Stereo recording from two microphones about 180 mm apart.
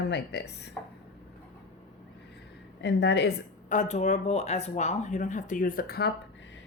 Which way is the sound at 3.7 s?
40° left (ahead or behind).